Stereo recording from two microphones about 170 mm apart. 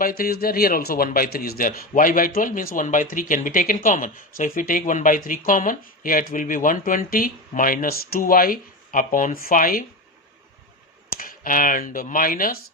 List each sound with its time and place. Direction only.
0.0 s a man's voice: 60° left (ahead or behind)
11.2 s speech: 55° left (ahead or behind)